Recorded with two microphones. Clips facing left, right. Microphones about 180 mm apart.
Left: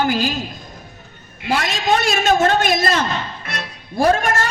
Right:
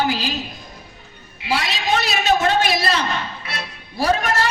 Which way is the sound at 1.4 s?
50° left (ahead or behind).